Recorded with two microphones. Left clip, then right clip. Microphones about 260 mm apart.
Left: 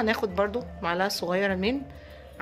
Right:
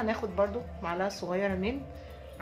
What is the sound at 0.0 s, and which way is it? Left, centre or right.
Speech, left.